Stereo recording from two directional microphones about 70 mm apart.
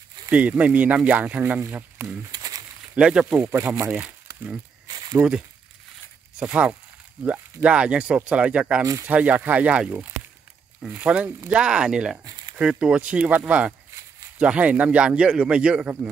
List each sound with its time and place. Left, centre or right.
0.3 s speech: centre
2.3 s a sound: right
3.0 s speech: centre
3.3 s speech: right
4.8 s a sound: right
6.4 s speech: centre
11.1 s speech: centre